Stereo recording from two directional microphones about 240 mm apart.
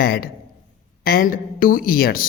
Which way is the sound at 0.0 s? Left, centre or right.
Left.